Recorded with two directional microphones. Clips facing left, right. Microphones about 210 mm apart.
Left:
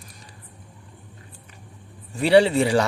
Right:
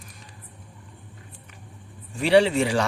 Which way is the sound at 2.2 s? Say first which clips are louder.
Left 2 dB; 35° left (ahead or behind).